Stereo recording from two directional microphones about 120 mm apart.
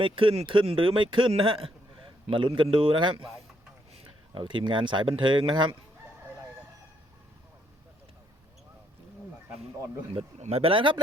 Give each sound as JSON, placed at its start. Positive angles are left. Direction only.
{"t": 0.0, "sound": "a man's voice", "side_deg": -45}
{"t": 4.4, "sound": "a man's voice", "side_deg": -40}
{"t": 10.4, "sound": "a man's voice", "side_deg": -55}